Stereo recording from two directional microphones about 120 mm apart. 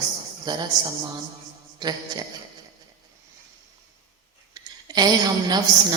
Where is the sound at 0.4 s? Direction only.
35° right (ahead or behind).